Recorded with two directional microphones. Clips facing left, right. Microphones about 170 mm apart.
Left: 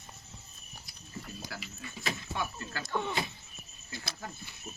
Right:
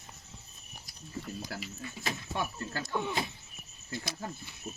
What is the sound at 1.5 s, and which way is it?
Speech, 40° right (ahead or behind).